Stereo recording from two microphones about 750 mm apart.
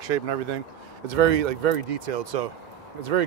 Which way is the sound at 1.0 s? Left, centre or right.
Right.